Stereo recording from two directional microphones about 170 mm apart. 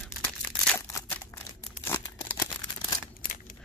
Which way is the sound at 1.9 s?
15° left (ahead or behind).